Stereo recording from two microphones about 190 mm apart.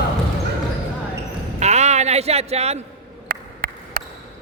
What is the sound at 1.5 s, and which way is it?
Music, 35° right (ahead or behind).